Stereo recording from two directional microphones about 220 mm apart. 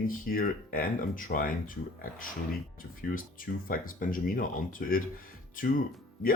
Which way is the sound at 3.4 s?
40° left (ahead or behind).